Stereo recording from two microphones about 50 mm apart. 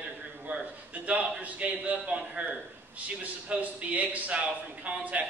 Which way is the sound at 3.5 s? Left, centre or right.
Right.